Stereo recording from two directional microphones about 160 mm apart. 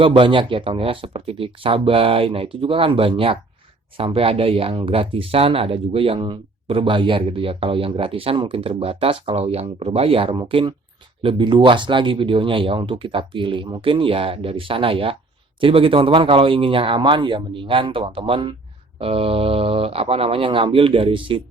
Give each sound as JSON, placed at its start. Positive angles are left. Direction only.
{"t": 0.0, "sound": "speech", "side_deg": -30}